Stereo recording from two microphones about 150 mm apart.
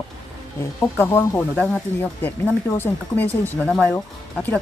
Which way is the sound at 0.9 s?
15° left (ahead or behind).